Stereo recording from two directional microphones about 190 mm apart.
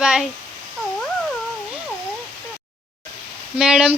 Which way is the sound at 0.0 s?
5° right (ahead or behind).